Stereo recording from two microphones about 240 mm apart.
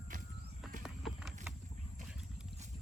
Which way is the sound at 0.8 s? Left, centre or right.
Centre.